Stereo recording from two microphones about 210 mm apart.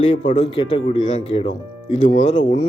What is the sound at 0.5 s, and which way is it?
Speech, 20° left (ahead or behind).